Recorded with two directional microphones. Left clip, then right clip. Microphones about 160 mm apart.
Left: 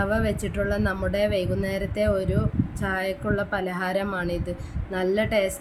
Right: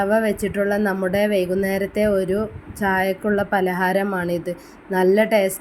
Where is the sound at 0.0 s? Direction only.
20° right (ahead or behind).